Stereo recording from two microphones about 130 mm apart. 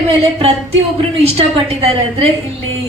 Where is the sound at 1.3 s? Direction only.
50° right (ahead or behind).